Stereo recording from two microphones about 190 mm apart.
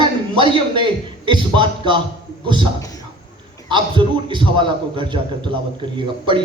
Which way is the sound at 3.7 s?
25° right (ahead or behind).